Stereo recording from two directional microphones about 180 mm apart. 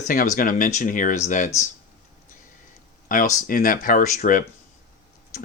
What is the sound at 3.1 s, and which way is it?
Speech, 45° left (ahead or behind).